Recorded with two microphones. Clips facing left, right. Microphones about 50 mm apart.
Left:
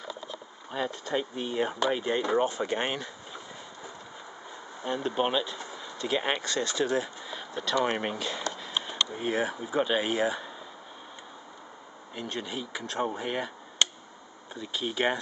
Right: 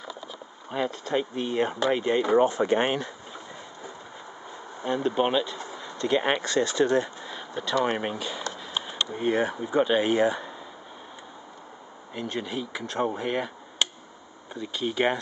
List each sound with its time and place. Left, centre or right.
0.3 s a sound: centre
1.1 s speech: centre
2.4 s speech: right
4.8 s speech: centre
5.8 s a sound: centre
6.4 s speech: right
6.8 s speech: centre
8.5 s a sound: centre
9.1 s speech: centre
12.1 s speech: centre